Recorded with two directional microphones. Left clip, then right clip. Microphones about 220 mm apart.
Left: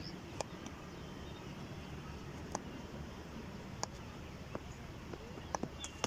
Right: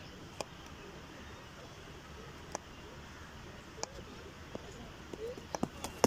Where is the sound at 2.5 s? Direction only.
Centre (ahead or behind).